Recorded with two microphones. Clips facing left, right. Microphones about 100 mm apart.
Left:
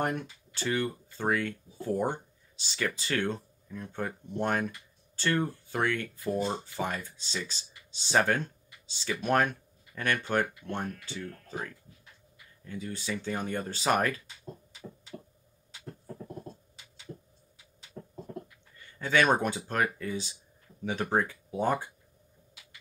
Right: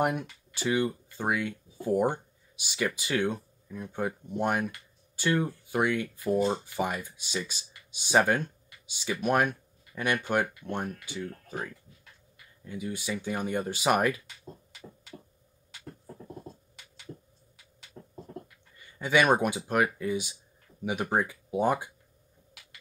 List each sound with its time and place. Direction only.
0.0 s speech: 15° right (ahead or behind)
18.9 s speech: 15° right (ahead or behind)